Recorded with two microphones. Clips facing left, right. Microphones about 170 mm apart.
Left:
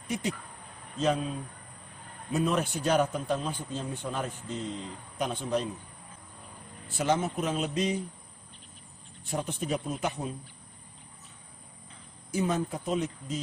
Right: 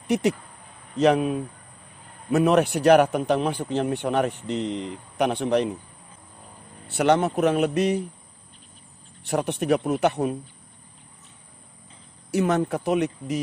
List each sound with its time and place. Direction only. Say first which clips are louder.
0.0 s speech: right 10 dB; 75° right (ahead or behind)
6.9 s speech: right 8 dB; 70° right (ahead or behind)
9.2 s speech: right 8 dB; 75° right (ahead or behind)
12.3 s speech: right 7 dB; 70° right (ahead or behind)